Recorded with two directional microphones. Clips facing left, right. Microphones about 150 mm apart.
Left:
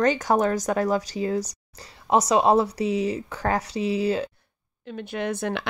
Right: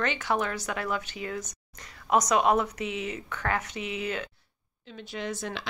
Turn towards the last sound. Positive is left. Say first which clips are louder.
# left 7 dB
turn(degrees=60)  # may be behind; listen again after turning